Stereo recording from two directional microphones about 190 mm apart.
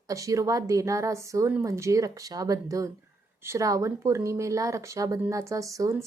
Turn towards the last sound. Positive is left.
turn(degrees=-15)  # may be behind; listen again after turning